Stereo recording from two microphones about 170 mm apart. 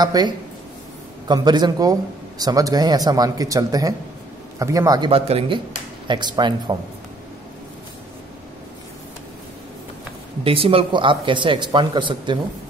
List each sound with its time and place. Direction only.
0.0 s a man's voice: 25° right (ahead or behind)
5.1 s a man's voice: 35° right (ahead or behind)
10.4 s a man's voice: 35° right (ahead or behind)